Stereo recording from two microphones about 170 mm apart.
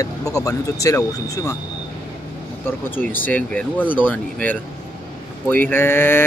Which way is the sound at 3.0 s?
10° left (ahead or behind).